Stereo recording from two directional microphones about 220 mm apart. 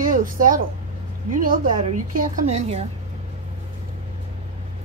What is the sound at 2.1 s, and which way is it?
Speech, 30° right (ahead or behind).